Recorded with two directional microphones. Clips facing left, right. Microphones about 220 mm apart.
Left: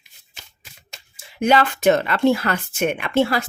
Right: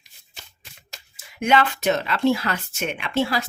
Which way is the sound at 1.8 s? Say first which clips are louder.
Left 4 dB; 55° left (ahead or behind).